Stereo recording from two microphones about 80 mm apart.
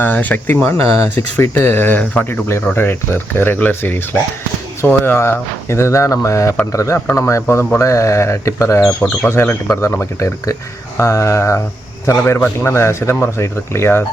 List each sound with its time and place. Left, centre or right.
0.0 s speech: left
7.8 s speech: left